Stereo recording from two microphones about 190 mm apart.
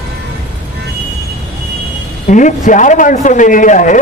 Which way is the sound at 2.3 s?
40° left (ahead or behind).